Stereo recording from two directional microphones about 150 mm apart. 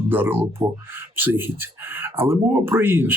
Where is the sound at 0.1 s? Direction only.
15° right (ahead or behind).